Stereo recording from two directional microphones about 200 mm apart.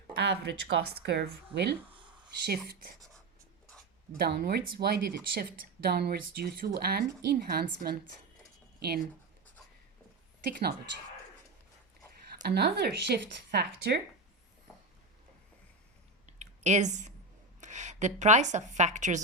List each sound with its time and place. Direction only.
0.1 s speech: 55° right (ahead or behind)
1.9 s a sound: 25° right (ahead or behind)
2.4 s speech: 50° right (ahead or behind)
4.2 s speech: 55° right (ahead or behind)
10.5 s speech: 50° right (ahead or behind)
12.3 s speech: 55° right (ahead or behind)
16.2 s a sound: 35° right (ahead or behind)
17.6 s a woman's voice: 35° right (ahead or behind)